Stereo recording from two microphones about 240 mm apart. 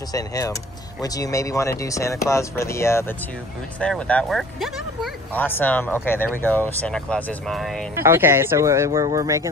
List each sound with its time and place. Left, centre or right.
0.1 s speech: centre
7.9 s speech: centre